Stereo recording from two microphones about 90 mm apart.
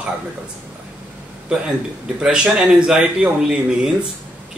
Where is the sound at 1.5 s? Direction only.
10° right (ahead or behind).